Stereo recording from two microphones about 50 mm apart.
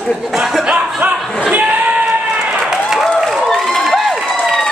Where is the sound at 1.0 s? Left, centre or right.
Right.